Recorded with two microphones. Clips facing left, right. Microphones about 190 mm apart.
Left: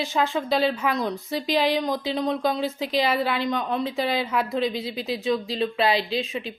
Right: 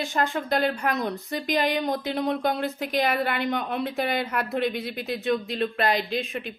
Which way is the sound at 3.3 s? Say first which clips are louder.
Left 2 dB; 55° right (ahead or behind).